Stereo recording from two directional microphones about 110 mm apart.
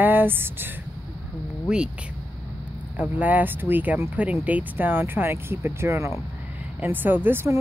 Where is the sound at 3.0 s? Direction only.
15° right (ahead or behind).